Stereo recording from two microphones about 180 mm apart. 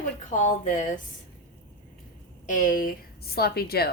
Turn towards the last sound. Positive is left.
turn(degrees=60)  # may be behind; listen again after turning